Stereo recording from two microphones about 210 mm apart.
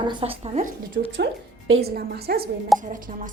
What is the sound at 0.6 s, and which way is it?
A woman's voice, 40° right (ahead or behind).